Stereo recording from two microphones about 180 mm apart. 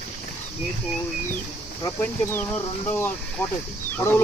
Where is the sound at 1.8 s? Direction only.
10° left (ahead or behind).